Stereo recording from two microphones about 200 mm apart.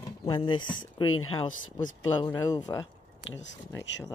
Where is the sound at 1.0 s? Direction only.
90° left.